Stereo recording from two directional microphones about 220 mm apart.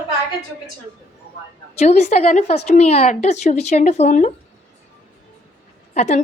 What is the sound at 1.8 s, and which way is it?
A woman's voice, 30° left (ahead or behind).